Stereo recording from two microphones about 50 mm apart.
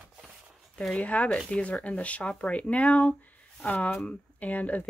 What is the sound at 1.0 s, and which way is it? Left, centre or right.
Speech, left.